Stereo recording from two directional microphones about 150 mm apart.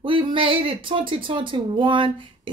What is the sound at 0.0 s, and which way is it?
A woman's voice, 35° right (ahead or behind).